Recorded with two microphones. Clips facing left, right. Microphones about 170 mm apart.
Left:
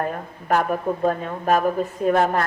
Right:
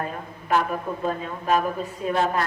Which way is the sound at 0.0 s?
50° left (ahead or behind).